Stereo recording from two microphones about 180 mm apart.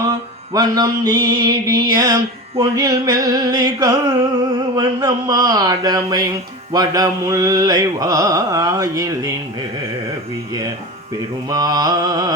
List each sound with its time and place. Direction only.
0.5 s music: 20° right (ahead or behind)
11.4 s music: 20° right (ahead or behind)